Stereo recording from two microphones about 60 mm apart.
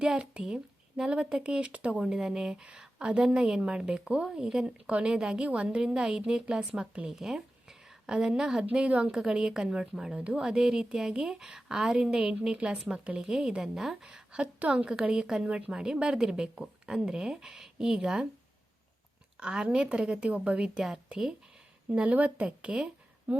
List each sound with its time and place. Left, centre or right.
0.0 s a woman's voice: centre
9.1 s speech: centre
19.4 s speech: centre
21.8 s speech: right
23.3 s a sound: right